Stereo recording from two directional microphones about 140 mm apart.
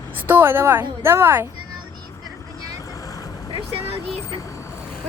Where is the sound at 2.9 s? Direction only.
25° left (ahead or behind).